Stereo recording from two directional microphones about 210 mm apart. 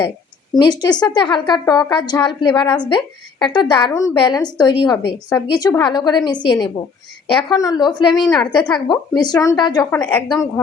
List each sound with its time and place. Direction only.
0.6 s a woman's voice: 20° left (ahead or behind)
8.1 s a woman's voice: centre (ahead or behind)
8.9 s a woman's voice: 20° left (ahead or behind)
9.9 s a woman's voice: 10° left (ahead or behind)